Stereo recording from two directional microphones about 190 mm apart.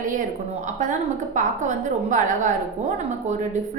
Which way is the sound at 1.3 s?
40° right (ahead or behind).